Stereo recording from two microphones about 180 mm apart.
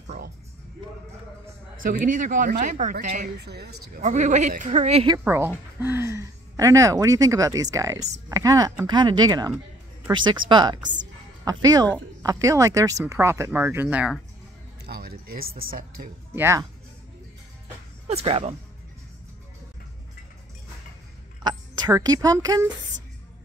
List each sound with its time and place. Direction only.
1.8 s a man's voice: 50° right (ahead or behind)
3.3 s speech: 65° right (ahead or behind)
4.0 s a man's voice: 40° right (ahead or behind)
5.2 s speech: 10° right (ahead or behind)
14.9 s speech: 55° right (ahead or behind)
16.3 s speech: 15° right (ahead or behind)
18.0 s speech: 35° right (ahead or behind)
21.4 s speech: 25° right (ahead or behind)